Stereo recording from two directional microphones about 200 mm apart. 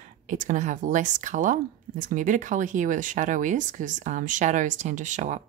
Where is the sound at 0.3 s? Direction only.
40° right (ahead or behind).